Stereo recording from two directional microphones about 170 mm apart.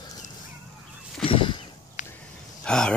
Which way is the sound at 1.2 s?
30° left (ahead or behind).